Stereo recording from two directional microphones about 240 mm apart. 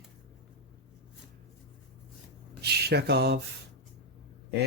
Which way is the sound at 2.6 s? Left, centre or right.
Right.